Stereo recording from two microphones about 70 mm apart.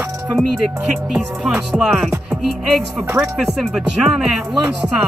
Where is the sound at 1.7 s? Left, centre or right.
Centre.